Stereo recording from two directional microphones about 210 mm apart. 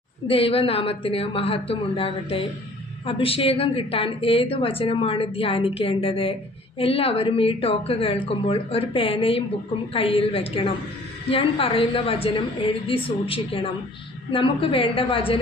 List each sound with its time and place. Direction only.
0.3 s a woman's voice: 25° left (ahead or behind)